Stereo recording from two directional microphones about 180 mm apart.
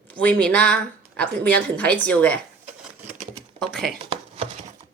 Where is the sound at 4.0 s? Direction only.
30° right (ahead or behind).